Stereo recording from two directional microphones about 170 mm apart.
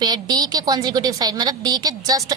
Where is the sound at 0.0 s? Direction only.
25° right (ahead or behind).